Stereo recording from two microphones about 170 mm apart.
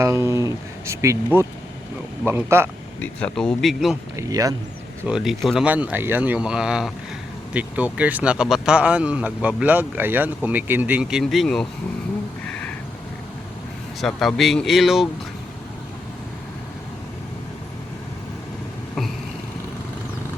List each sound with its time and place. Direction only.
0.0 s speech: 15° right (ahead or behind)
3.0 s speech: 5° left (ahead or behind)
4.2 s speech: 20° right (ahead or behind)
5.0 s speech: 5° right (ahead or behind)
12.5 s a sound: 10° left (ahead or behind)
14.0 s speech: centre (ahead or behind)